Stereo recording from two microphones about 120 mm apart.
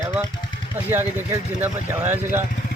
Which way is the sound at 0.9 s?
15° right (ahead or behind).